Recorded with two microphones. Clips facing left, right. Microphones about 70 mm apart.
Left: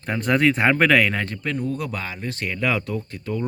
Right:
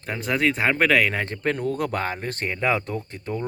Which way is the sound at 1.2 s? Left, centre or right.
Right.